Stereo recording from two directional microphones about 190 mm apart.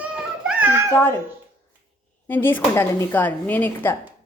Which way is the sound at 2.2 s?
10° left (ahead or behind).